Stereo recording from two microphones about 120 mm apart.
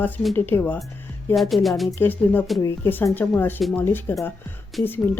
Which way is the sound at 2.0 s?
15° left (ahead or behind).